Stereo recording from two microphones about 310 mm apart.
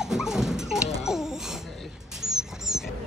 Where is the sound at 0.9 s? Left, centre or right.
Centre.